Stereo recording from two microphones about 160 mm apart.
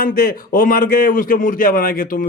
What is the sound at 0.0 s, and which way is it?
Speech, 70° left (ahead or behind).